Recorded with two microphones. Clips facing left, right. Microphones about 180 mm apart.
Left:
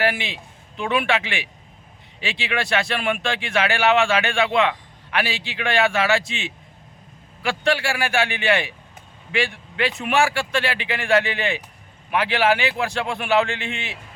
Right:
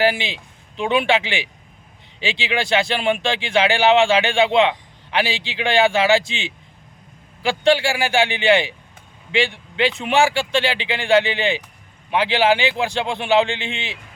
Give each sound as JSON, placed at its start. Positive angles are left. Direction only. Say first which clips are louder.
{"t": 0.0, "sound": "a man's voice", "louder": "right 4 dB", "side_deg": -30}